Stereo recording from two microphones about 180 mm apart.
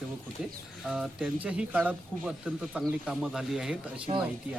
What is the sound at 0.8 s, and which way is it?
Speech, 5° right (ahead or behind).